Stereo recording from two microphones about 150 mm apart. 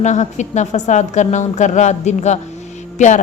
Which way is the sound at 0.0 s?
50° left (ahead or behind).